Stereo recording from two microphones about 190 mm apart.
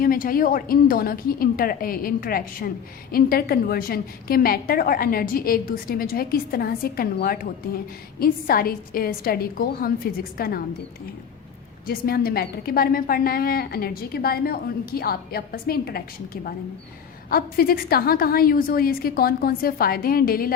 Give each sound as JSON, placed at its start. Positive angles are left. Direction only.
{"t": 0.0, "sound": "a woman's voice", "side_deg": 50}
{"t": 11.9, "sound": "a woman's voice", "side_deg": 55}